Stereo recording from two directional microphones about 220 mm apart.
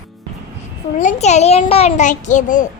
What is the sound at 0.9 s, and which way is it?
A child's voice, 30° left (ahead or behind).